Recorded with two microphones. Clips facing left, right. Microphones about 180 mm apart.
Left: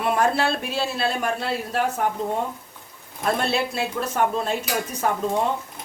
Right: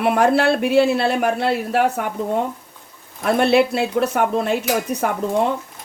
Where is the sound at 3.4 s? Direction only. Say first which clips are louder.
Right 9 dB; 65° right (ahead or behind).